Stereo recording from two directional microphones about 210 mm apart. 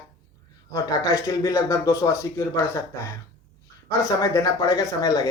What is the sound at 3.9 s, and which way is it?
Speech, 15° left (ahead or behind).